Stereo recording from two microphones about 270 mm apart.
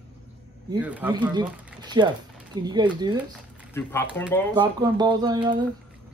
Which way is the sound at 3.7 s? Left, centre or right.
Centre.